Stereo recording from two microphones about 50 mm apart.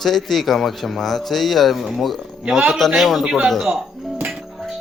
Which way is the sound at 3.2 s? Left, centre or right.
Centre.